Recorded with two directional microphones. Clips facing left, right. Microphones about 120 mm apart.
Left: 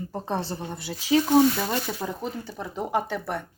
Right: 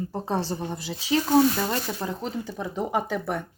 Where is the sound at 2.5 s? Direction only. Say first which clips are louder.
Even; centre (ahead or behind).